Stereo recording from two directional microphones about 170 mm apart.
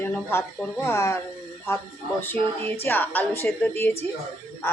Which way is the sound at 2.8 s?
10° left (ahead or behind).